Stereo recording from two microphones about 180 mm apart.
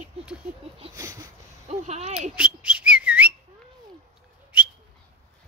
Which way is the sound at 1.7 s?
40° right (ahead or behind).